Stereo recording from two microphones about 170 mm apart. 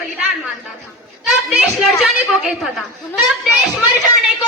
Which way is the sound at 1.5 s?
Centre (ahead or behind).